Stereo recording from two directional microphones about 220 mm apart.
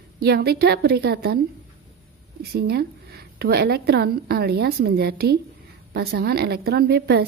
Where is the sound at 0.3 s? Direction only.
45° right (ahead or behind).